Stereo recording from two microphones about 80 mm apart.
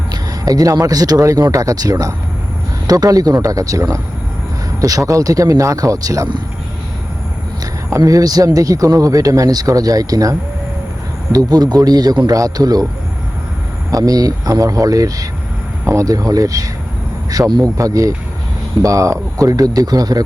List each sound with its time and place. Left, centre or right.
0.1 s speech: right
7.6 s a man's voice: right
12.3 s speech: right
13.9 s speech: right